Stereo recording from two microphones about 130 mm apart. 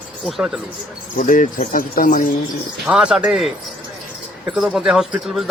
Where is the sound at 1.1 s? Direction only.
90° left.